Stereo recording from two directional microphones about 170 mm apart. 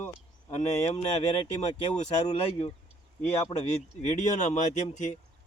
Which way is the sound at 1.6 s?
40° left (ahead or behind).